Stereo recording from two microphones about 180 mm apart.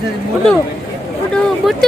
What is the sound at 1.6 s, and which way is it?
Speech, centre (ahead or behind).